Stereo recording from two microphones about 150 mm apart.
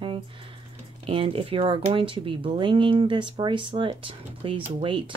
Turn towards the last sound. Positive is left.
turn(degrees=-35)  # may be behind; listen again after turning